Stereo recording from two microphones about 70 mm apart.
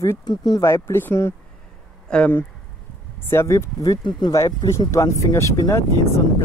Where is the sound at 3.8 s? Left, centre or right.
Left.